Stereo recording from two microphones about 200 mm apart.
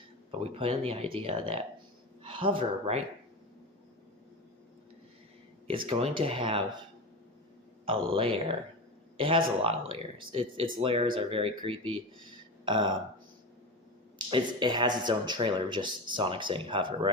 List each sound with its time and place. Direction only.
0.3 s speech: 30° right (ahead or behind)
5.6 s speech: 25° right (ahead or behind)
7.9 s speech: 25° right (ahead or behind)
14.3 s speech: 25° right (ahead or behind)